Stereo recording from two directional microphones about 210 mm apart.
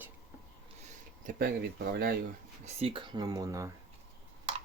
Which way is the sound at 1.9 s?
50° right (ahead or behind).